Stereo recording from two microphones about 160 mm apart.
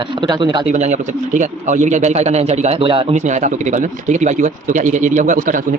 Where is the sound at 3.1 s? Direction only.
50° right (ahead or behind).